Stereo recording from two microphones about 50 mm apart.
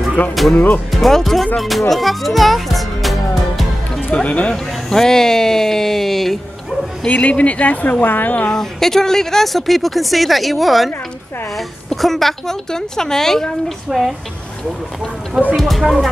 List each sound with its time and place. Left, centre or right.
0.4 s speech: centre
1.6 s music: centre
4.1 s speech: left
4.8 s speech: centre
7.1 s speech: left
8.5 s a woman's voice: centre
13.8 s speech: centre
15.5 s speech: centre